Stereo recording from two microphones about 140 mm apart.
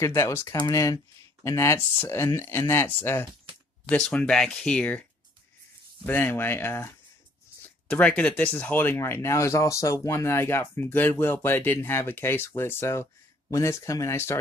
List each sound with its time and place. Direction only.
0.0 s speech: 20° left (ahead or behind)
6.0 s speech: 15° left (ahead or behind)
7.9 s speech: 10° left (ahead or behind)